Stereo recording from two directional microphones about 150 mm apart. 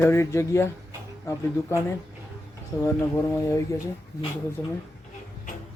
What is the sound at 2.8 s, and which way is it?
Speech, 20° left (ahead or behind).